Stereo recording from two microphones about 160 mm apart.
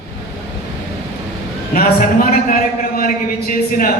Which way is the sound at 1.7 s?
65° left (ahead or behind).